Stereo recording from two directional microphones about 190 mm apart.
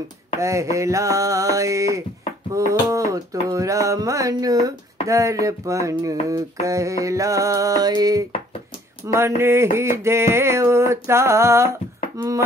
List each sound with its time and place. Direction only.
0.4 s mantra: 15° right (ahead or behind)